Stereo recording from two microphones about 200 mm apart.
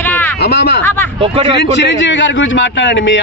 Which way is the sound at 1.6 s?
60° left (ahead or behind).